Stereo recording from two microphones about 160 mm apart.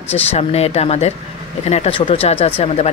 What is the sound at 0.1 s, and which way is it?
Speech, 40° left (ahead or behind).